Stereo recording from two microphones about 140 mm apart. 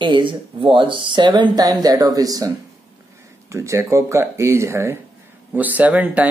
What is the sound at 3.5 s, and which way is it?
Speech, 20° right (ahead or behind).